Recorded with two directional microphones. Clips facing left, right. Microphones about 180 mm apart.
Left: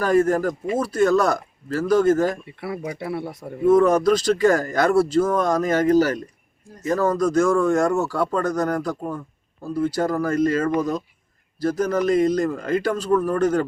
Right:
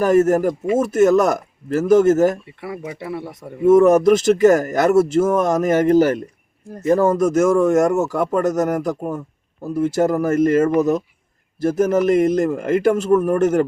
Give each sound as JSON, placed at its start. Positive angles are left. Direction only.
{"t": 0.0, "sound": "a man's voice", "side_deg": -20}
{"t": 3.0, "sound": "speech", "side_deg": 10}
{"t": 3.7, "sound": "a man's voice", "side_deg": -25}